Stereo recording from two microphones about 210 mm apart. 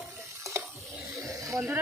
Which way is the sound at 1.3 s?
15° right (ahead or behind).